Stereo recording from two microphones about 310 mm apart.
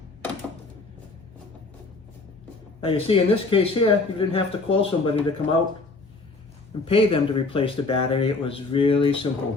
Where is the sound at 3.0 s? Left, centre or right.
Centre.